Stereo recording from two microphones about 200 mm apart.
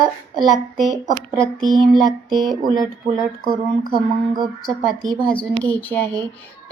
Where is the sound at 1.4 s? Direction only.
Centre (ahead or behind).